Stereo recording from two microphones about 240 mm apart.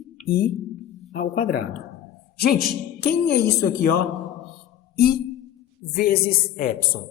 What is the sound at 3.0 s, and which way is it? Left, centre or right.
Speech, left.